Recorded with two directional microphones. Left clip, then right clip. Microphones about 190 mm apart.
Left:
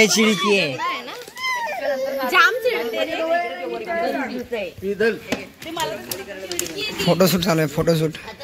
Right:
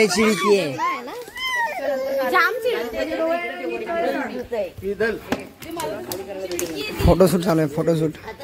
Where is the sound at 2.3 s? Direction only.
50° left (ahead or behind).